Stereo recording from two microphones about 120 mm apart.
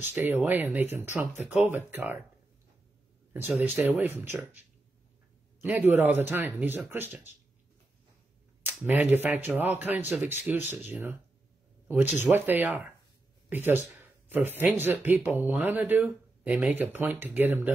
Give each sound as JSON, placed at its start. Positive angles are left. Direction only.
{"t": 0.0, "sound": "speech", "side_deg": -15}
{"t": 3.3, "sound": "speech", "side_deg": -15}
{"t": 8.8, "sound": "speech", "side_deg": -15}